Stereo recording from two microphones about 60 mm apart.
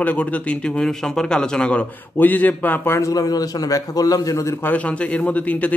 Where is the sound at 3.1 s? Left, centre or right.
Left.